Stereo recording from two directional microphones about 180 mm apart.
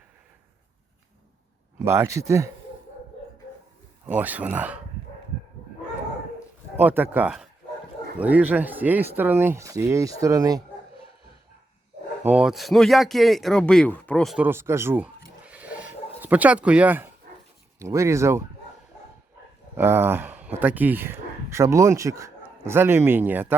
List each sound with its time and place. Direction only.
1.8 s speech: 15° right (ahead or behind)
4.1 s speech: 10° right (ahead or behind)
6.7 s speech: 10° right (ahead or behind)
12.2 s speech: 5° right (ahead or behind)
14.3 s a sound: 10° right (ahead or behind)
17.7 s speech: 15° right (ahead or behind)
19.7 s speech: 10° right (ahead or behind)